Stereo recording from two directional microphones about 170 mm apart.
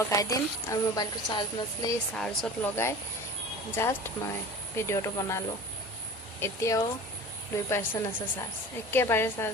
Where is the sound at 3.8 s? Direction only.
15° left (ahead or behind).